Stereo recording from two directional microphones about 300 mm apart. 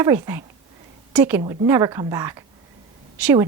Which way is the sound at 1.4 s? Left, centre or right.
Centre.